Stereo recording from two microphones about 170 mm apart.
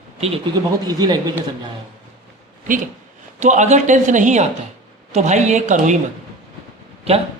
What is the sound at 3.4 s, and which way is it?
A man's voice, 45° right (ahead or behind).